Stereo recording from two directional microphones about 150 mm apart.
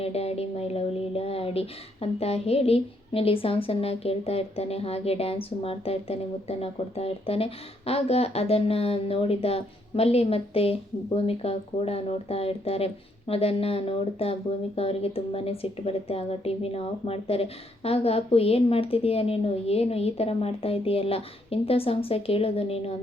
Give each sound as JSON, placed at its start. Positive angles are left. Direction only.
{"t": 0.0, "sound": "a woman's voice", "side_deg": 45}